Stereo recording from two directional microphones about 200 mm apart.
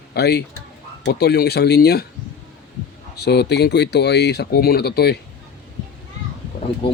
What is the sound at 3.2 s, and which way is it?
Speech, 55° left (ahead or behind).